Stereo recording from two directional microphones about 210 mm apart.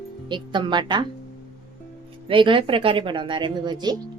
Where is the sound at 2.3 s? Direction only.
25° right (ahead or behind).